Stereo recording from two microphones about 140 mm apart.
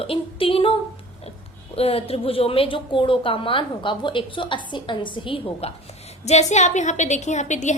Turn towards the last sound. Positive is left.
turn(degrees=60)  # may be behind; listen again after turning